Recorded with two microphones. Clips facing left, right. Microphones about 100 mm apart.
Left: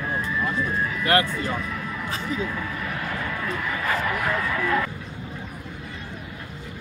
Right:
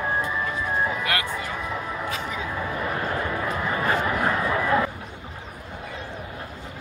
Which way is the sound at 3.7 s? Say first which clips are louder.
Right 2 dB; 35° right (ahead or behind).